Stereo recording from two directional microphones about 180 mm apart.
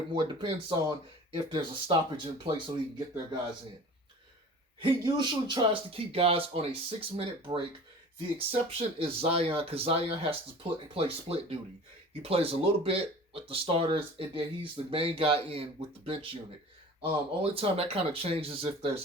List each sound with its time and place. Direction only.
0.1 s speech: 25° right (ahead or behind)
4.8 s speech: 25° right (ahead or behind)